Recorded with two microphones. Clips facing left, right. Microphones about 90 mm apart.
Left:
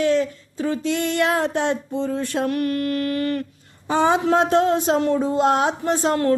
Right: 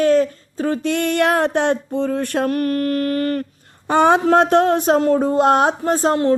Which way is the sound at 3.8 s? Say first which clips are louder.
Right 4 dB; 60° right (ahead or behind).